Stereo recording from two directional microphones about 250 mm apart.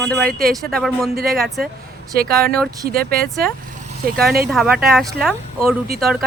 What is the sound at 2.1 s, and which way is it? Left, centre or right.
Speech, right.